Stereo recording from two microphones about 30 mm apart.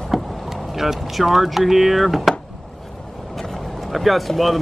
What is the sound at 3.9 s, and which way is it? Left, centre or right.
Speech, centre.